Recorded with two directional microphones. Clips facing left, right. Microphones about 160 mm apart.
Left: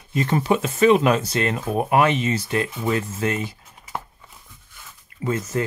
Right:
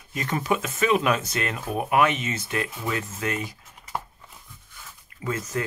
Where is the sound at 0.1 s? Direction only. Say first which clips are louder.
Left 5 dB; 30° left (ahead or behind).